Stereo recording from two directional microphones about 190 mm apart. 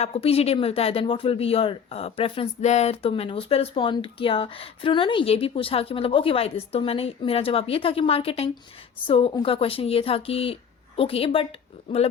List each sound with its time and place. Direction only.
0.0 s speech: 30° left (ahead or behind)